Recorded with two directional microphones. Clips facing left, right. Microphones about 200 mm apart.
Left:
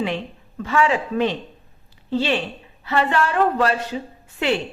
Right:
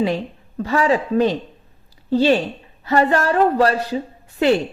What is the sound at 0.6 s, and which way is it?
A woman's voice, 35° right (ahead or behind).